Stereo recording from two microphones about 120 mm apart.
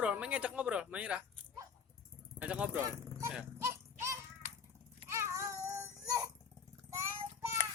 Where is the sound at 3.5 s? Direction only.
25° right (ahead or behind).